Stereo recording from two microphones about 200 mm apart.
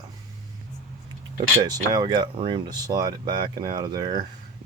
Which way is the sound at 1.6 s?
20° right (ahead or behind).